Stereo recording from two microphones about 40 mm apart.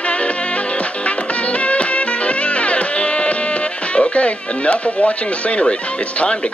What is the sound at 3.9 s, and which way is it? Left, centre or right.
Speech, left.